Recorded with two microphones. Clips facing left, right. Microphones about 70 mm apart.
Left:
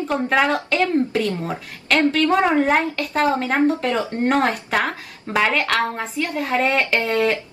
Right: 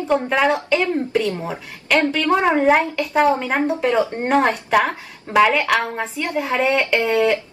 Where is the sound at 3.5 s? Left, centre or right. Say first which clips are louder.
Even; centre.